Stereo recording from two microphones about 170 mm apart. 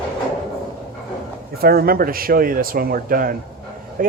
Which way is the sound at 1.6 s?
65° right (ahead or behind).